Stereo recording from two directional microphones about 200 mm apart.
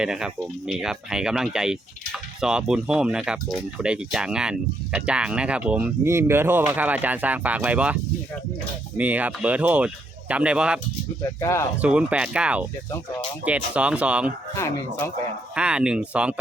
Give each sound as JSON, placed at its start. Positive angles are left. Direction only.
{"t": 0.0, "sound": "speech", "side_deg": -5}
{"t": 9.0, "sound": "speech", "side_deg": -10}
{"t": 11.2, "sound": "speech", "side_deg": 15}
{"t": 11.8, "sound": "speech", "side_deg": -5}
{"t": 12.9, "sound": "speech", "side_deg": 15}
{"t": 13.4, "sound": "speech", "side_deg": -5}
{"t": 14.5, "sound": "speech", "side_deg": 15}
{"t": 15.5, "sound": "speech", "side_deg": -5}